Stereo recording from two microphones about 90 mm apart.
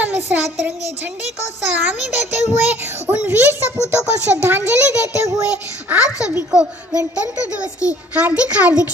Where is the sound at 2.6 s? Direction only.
20° right (ahead or behind).